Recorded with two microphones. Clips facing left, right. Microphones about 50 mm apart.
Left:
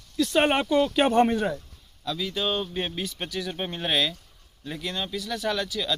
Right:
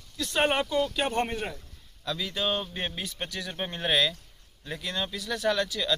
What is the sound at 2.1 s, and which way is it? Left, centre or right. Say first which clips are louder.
Speech: left 2 dB; centre.